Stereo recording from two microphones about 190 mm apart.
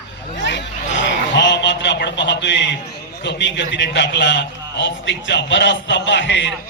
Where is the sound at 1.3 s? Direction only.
70° left (ahead or behind).